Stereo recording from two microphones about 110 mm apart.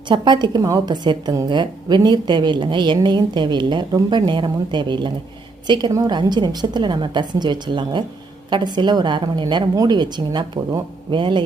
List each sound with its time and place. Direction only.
0.1 s a woman's voice: 45° right (ahead or behind)